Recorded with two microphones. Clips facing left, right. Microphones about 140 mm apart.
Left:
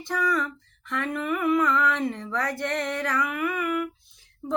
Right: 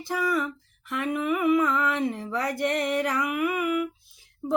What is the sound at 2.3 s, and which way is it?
Music, 10° right (ahead or behind).